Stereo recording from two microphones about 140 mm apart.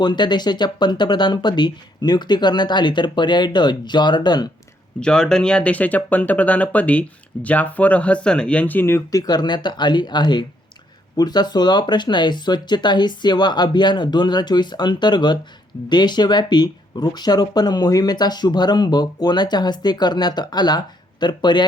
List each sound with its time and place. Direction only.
0.0 s speech: 35° left (ahead or behind)
4.9 s speech: 5° left (ahead or behind); by 21.6 s 30° left (ahead or behind)